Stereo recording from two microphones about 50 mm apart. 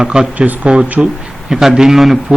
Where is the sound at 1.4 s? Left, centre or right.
Centre.